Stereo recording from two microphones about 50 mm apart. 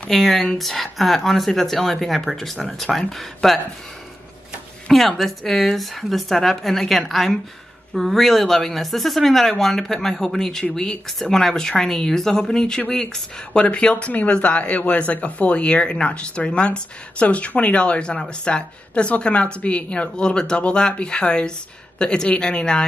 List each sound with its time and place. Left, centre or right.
0.1 s speech: centre
4.8 s speech: centre